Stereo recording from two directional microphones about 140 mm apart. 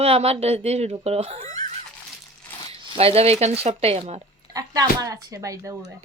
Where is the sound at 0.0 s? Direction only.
45° right (ahead or behind).